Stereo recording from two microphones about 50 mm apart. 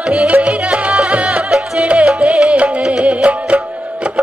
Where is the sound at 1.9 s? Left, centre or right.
Right.